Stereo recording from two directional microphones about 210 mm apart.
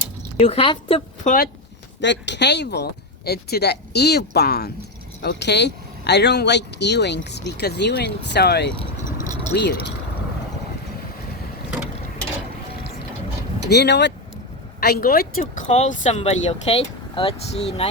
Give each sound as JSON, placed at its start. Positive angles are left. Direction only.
{"t": 0.3, "sound": "speech", "side_deg": 30}
{"t": 2.0, "sound": "speech", "side_deg": 55}
{"t": 13.7, "sound": "speech", "side_deg": 55}